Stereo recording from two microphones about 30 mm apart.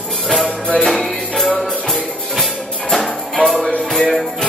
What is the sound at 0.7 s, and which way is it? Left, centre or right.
Music, centre.